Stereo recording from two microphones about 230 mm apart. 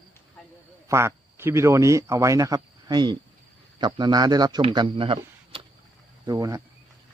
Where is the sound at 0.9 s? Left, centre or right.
Centre.